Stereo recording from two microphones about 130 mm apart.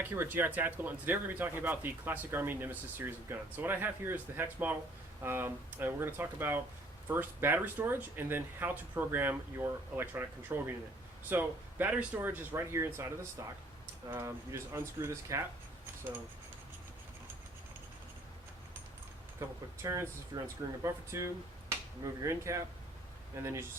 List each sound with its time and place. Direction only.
0.0 s speech: 15° right (ahead or behind)
19.8 s speech: 25° right (ahead or behind)